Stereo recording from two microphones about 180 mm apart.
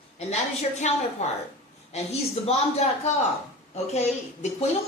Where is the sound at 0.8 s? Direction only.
40° left (ahead or behind).